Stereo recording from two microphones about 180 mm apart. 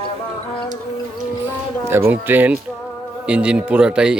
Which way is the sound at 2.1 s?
10° right (ahead or behind).